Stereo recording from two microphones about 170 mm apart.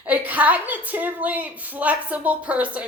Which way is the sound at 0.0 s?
10° right (ahead or behind).